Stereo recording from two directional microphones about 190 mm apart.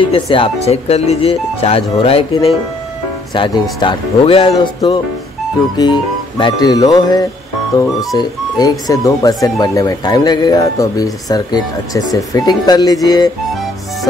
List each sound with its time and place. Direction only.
0.1 s speech: 30° left (ahead or behind)